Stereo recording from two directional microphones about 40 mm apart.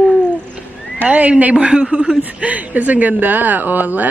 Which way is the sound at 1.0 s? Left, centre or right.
Right.